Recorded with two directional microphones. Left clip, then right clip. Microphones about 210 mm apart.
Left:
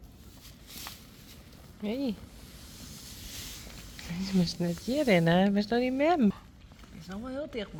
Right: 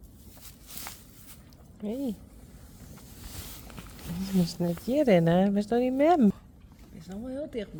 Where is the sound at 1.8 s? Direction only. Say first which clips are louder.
Even; 10° right (ahead or behind).